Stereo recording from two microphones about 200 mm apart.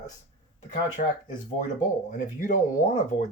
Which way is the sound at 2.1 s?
40° left (ahead or behind).